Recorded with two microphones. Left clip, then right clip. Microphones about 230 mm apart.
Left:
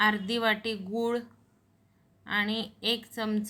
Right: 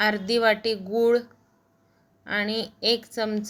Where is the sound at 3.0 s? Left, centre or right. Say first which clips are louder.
Right 5 dB; centre.